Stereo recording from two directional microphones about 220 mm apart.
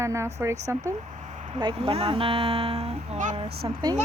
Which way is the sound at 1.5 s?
25° right (ahead or behind).